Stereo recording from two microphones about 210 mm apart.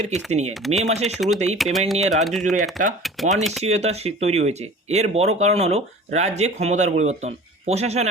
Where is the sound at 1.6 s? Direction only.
Centre (ahead or behind).